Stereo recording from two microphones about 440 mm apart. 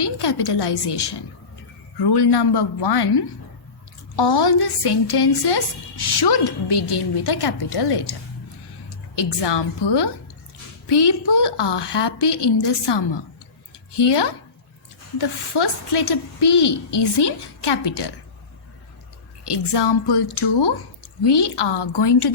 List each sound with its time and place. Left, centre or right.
0.2 s a woman's voice: left
9.1 s a woman's voice: left
19.5 s a woman's voice: left
21.2 s a woman's voice: left